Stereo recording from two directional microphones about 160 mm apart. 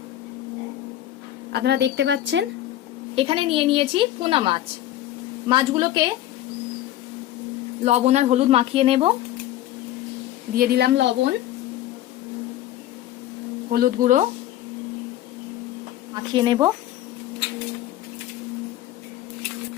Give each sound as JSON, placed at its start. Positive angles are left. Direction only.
{"t": 1.5, "sound": "a woman's voice", "side_deg": -90}
{"t": 3.2, "sound": "a woman's voice", "side_deg": -35}
{"t": 7.9, "sound": "a woman's voice", "side_deg": -45}
{"t": 10.5, "sound": "a woman's voice", "side_deg": -70}
{"t": 13.7, "sound": "speech", "side_deg": -65}
{"t": 16.3, "sound": "speech", "side_deg": -30}